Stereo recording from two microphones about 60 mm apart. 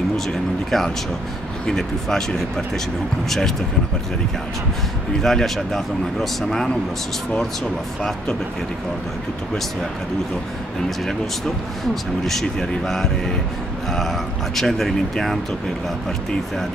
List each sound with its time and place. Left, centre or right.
0.3 s speech: centre
5.2 s speech: centre
11.1 s speech: centre
14.5 s speech: centre